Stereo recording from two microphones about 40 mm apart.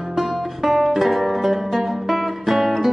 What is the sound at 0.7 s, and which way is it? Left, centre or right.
Music, centre.